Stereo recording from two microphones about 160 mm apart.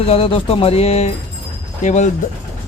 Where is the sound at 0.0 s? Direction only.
40° left (ahead or behind).